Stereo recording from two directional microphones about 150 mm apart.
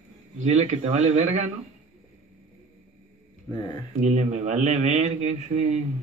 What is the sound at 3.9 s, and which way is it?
A man's voice, 50° right (ahead or behind).